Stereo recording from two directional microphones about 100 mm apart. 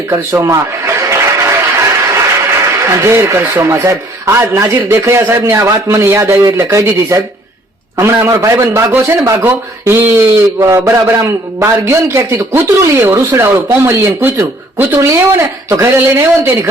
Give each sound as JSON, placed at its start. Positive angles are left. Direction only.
{"t": 0.1, "sound": "a man's voice", "side_deg": -30}